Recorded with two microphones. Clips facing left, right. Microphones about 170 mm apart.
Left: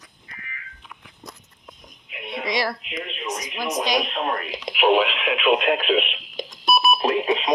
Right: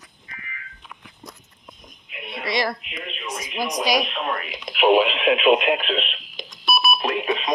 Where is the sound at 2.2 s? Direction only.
20° left (ahead or behind).